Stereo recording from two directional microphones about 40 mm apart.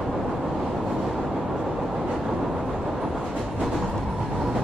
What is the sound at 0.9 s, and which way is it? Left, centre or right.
Vehicle, centre.